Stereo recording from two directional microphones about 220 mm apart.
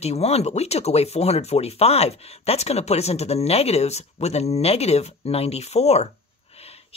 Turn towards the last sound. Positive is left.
turn(degrees=30)  # may be behind; listen again after turning